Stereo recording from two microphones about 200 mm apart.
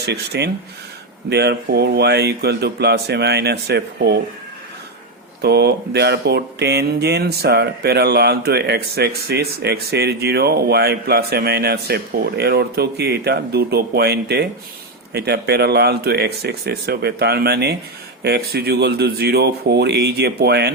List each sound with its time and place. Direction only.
0.0 s a man's voice: 55° right (ahead or behind)
5.4 s a man's voice: 55° right (ahead or behind)